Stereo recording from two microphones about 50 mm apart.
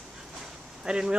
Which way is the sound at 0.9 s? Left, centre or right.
Centre.